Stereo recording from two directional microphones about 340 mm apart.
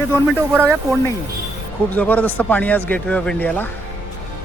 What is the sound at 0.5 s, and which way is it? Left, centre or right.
Speech, centre.